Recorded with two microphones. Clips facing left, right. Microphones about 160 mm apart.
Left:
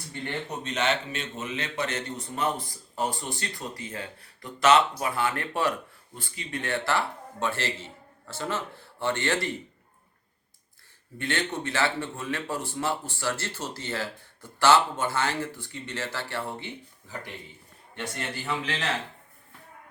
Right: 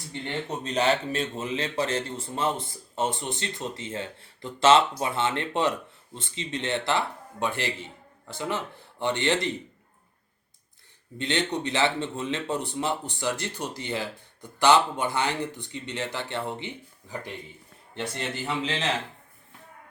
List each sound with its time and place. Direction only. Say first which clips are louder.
0.6 s speech: right 4 dB; 35° right (ahead or behind); by 9.6 s 20° right (ahead or behind)
11.2 s speech: right 3 dB; 20° right (ahead or behind)